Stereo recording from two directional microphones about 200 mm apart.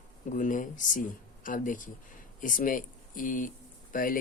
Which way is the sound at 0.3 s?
40° left (ahead or behind).